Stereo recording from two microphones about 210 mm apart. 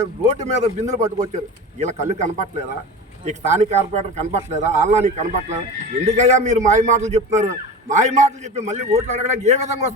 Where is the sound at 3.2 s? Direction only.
35° right (ahead or behind).